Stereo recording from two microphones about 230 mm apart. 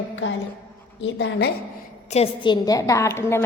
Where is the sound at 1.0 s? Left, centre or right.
Left.